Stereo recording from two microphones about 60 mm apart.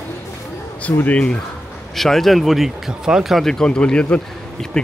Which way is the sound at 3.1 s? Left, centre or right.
Centre.